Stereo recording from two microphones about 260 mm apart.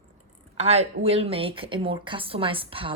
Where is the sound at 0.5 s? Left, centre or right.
Right.